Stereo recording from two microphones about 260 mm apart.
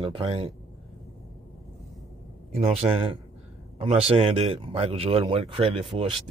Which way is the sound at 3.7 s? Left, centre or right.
Right.